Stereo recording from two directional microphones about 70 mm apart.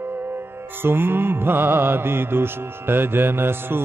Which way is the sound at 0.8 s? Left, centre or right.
Right.